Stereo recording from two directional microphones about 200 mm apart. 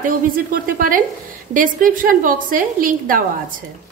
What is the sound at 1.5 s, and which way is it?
A woman's voice, 45° right (ahead or behind).